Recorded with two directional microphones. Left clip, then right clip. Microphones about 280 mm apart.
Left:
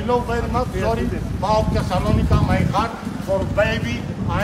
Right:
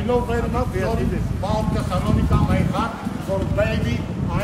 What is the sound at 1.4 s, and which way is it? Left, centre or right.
Speech, left.